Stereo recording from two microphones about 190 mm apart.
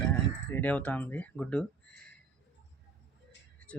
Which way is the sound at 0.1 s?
10° left (ahead or behind).